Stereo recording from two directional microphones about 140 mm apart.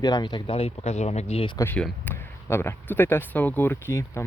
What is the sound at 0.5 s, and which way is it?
Speech, 45° left (ahead or behind).